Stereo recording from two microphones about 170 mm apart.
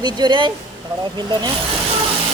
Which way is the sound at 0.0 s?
25° right (ahead or behind).